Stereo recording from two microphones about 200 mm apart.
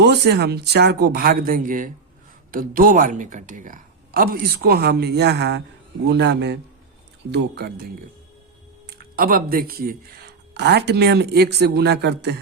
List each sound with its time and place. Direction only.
0.0 s speech: 55° right (ahead or behind)
8.9 s speech: 45° right (ahead or behind)